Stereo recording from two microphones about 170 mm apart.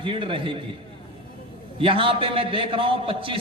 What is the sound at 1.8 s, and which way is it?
A man's voice, 30° right (ahead or behind).